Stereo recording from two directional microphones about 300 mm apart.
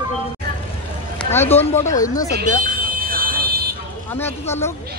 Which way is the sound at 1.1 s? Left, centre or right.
Centre.